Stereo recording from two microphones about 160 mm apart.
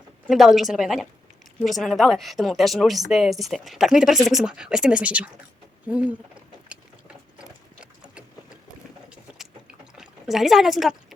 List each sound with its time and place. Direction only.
0.3 s a woman's voice: centre (ahead or behind)
7.3 s a sound: 5° right (ahead or behind)
10.0 s speech: centre (ahead or behind)